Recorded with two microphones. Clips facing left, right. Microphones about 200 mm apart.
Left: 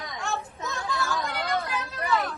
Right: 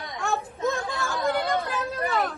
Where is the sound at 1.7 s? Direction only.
45° right (ahead or behind).